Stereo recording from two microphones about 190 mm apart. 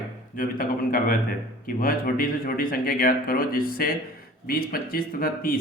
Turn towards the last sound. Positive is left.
turn(degrees=50)  # may be behind; listen again after turning